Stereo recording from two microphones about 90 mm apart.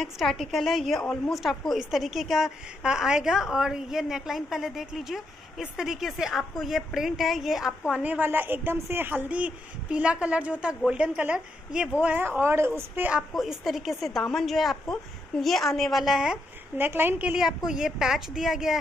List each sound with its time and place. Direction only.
0.0 s a woman's voice: centre (ahead or behind)
8.0 s a man's voice: 20° right (ahead or behind)
13.3 s a woman's voice: centre (ahead or behind)
16.7 s a woman's voice: 25° right (ahead or behind)
17.6 s a woman's voice: 5° right (ahead or behind)